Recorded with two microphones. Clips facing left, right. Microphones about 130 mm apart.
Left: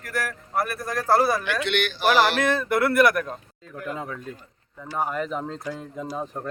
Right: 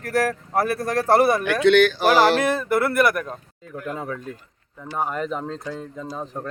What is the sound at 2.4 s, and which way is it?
Speech, 5° right (ahead or behind).